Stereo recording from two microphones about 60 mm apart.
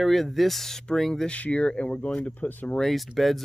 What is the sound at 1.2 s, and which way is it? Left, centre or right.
Speech, left.